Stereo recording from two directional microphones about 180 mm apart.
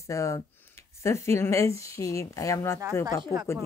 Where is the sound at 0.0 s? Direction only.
15° left (ahead or behind).